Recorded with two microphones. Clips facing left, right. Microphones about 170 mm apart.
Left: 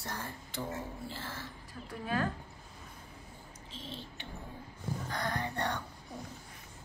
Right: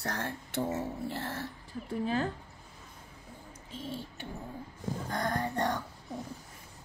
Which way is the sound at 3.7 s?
10° right (ahead or behind).